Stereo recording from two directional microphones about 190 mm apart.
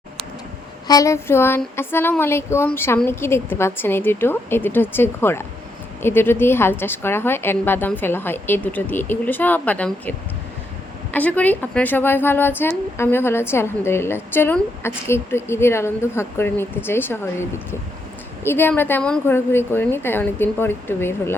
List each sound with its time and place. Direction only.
0.9 s speech: 15° left (ahead or behind)
18.4 s speech: 10° left (ahead or behind)